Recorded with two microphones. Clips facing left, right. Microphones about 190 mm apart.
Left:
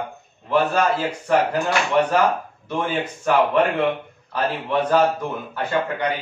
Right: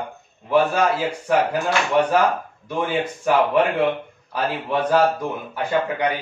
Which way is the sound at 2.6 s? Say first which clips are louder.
Right 1 dB; 10° right (ahead or behind).